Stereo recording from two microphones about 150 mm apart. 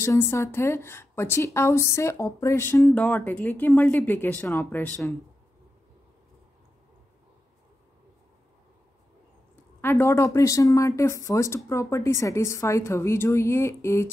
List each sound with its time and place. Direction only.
0.0 s a woman's voice: 15° left (ahead or behind)
9.8 s speech: 15° left (ahead or behind)